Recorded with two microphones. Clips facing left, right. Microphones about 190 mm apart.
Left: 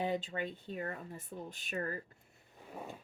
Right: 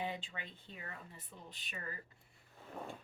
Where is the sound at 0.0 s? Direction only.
40° left (ahead or behind).